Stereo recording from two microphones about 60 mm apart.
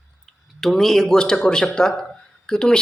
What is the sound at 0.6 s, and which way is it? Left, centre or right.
Speech, centre.